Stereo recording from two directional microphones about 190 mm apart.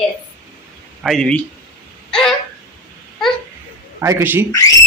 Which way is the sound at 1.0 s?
Centre (ahead or behind).